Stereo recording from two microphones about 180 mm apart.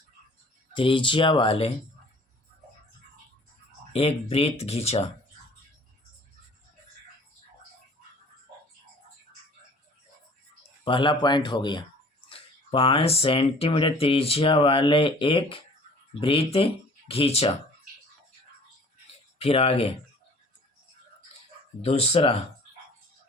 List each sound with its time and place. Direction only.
0.7 s speech: 30° left (ahead or behind)
3.9 s speech: 35° left (ahead or behind)
10.8 s speech: 30° left (ahead or behind)
19.4 s speech: 35° left (ahead or behind)
21.8 s speech: 35° left (ahead or behind)